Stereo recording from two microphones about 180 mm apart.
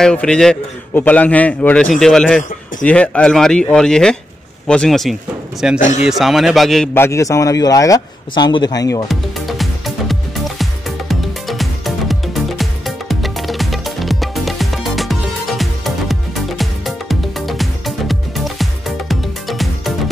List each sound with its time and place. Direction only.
0.0 s a man's voice: 5° left (ahead or behind)
5.8 s speech: 40° left (ahead or behind)
6.0 s a man's voice: centre (ahead or behind)
6.9 s speech: 15° left (ahead or behind)
9.0 s music: centre (ahead or behind)